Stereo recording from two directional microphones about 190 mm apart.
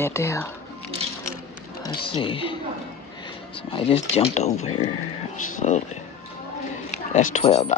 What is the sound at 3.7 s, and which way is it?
Speech, 30° left (ahead or behind).